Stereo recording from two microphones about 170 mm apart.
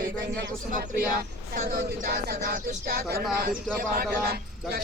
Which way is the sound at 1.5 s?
60° right (ahead or behind).